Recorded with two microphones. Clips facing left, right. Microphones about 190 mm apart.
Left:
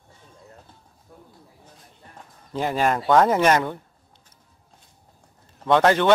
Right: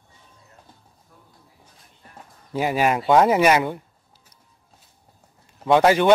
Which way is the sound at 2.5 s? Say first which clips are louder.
Right 2 dB; 10° right (ahead or behind).